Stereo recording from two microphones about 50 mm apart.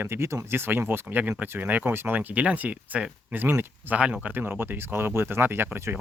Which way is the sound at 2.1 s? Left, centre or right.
Right.